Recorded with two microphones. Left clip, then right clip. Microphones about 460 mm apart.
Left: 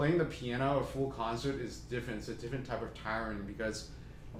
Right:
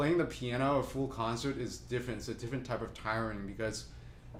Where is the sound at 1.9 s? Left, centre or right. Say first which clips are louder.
Right 2 dB; centre.